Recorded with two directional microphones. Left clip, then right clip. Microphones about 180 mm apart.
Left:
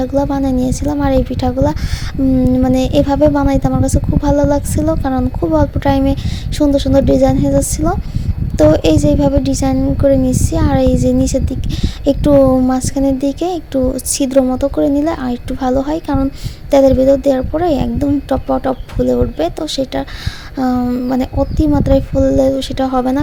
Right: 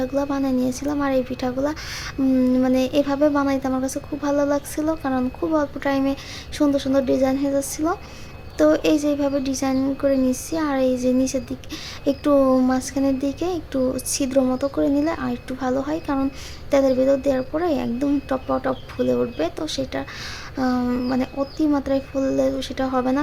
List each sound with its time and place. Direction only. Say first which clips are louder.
0.0 s a woman's voice: left 7 dB; 25° left (ahead or behind)